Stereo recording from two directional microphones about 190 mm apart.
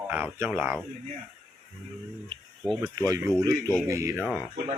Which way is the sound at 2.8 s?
20° right (ahead or behind).